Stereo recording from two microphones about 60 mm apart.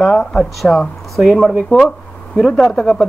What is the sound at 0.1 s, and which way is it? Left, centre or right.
Speech, centre.